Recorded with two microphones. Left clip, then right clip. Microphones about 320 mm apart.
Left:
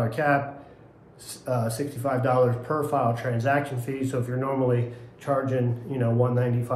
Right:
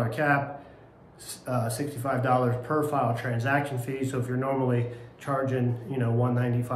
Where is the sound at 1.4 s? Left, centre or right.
Centre.